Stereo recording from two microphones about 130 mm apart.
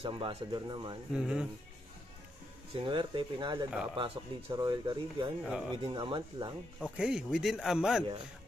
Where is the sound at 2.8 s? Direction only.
40° right (ahead or behind).